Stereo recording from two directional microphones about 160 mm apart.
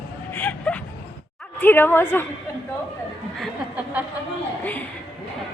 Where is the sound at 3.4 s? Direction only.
10° right (ahead or behind).